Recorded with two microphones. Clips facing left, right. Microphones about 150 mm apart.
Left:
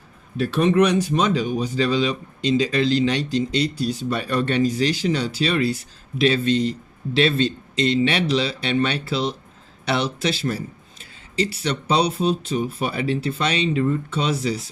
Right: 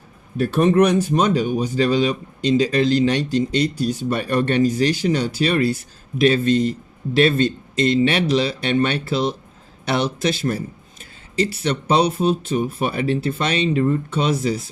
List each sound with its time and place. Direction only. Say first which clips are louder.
0.3 s speech: right 2 dB; 50° right (ahead or behind)